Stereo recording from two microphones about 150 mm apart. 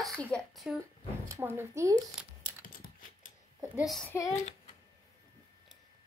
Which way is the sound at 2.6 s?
70° left (ahead or behind).